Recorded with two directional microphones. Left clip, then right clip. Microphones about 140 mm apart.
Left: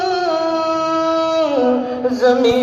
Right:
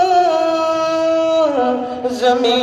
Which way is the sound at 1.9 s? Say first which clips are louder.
Left 1 dB; 25° right (ahead or behind).